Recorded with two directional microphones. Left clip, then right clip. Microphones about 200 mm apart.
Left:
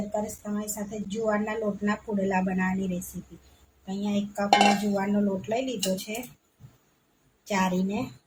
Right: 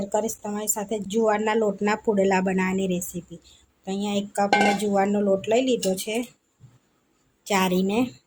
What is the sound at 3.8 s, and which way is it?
Speech, 55° right (ahead or behind).